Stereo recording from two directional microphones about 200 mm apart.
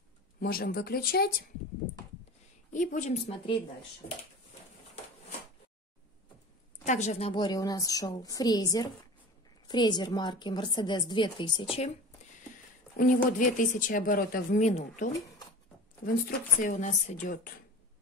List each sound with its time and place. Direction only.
0.4 s speech: 50° left (ahead or behind)
2.7 s speech: 40° left (ahead or behind)
6.8 s a woman's voice: 35° left (ahead or behind)
12.9 s a woman's voice: 40° left (ahead or behind)
16.3 s speech: 40° left (ahead or behind)